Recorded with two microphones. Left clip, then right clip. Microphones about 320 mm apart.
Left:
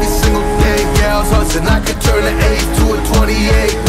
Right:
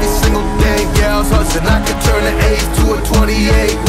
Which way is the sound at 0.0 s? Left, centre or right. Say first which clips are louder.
Even; centre.